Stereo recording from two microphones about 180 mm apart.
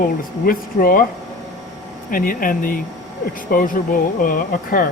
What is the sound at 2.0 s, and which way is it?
Speech, 50° left (ahead or behind).